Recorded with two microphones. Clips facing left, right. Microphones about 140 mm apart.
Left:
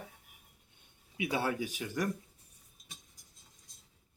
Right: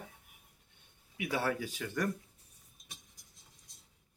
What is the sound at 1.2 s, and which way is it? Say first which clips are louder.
Speech: left 1 dB; 20° left (ahead or behind).